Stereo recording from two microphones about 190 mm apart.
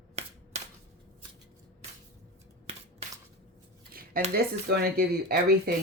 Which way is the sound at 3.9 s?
50° right (ahead or behind).